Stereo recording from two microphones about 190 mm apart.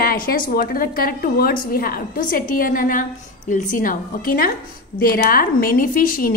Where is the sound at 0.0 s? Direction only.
50° left (ahead or behind).